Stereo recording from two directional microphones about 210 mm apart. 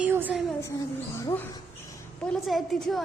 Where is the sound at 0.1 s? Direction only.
10° right (ahead or behind).